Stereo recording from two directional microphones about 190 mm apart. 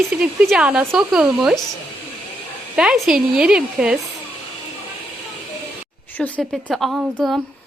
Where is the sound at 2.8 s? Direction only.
Centre (ahead or behind).